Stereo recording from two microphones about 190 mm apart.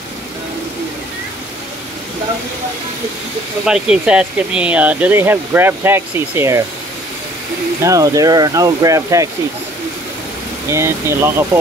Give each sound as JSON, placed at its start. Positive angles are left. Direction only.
{"t": 3.6, "sound": "speech", "side_deg": -5}
{"t": 7.8, "sound": "speech", "side_deg": -15}
{"t": 10.7, "sound": "speech", "side_deg": -15}